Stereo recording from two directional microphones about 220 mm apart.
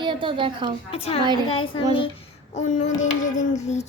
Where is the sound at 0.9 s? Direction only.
25° left (ahead or behind).